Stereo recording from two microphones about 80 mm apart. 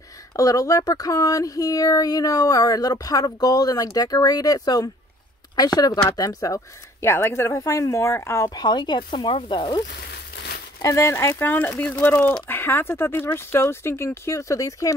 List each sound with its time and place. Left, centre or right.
0.3 s speech: left
6.0 s speech: left
7.1 s speech: left
8.5 s speech: left
10.8 s speech: left